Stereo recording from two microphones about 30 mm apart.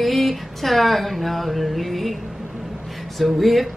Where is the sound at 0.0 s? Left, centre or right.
Centre.